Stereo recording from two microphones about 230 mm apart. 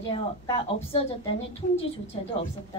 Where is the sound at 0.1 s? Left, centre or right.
Left.